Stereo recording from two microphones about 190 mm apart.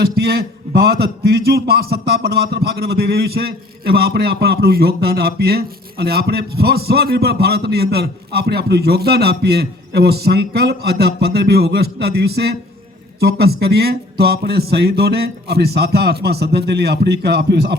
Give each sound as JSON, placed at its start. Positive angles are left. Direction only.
{"t": 0.0, "sound": "a man's voice", "side_deg": -55}